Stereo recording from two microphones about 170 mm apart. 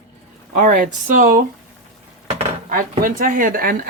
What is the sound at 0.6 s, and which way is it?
Speech, 50° right (ahead or behind).